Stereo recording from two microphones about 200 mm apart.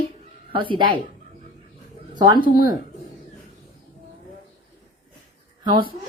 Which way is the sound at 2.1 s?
20° right (ahead or behind).